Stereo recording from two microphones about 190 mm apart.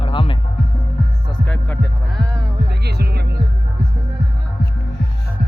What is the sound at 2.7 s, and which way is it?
Music, 60° right (ahead or behind).